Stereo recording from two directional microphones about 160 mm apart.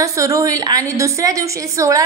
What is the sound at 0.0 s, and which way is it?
A woman's voice, 20° right (ahead or behind).